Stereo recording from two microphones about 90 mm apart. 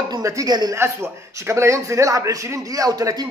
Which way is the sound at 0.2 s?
35° right (ahead or behind).